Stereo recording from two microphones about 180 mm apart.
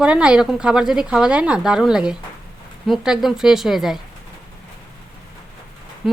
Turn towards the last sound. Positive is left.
turn(degrees=0)  # may be behind; listen again after turning